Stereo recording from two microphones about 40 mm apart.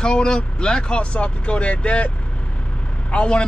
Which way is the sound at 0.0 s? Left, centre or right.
Left.